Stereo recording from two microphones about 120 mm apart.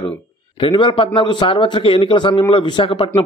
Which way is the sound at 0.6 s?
45° left (ahead or behind).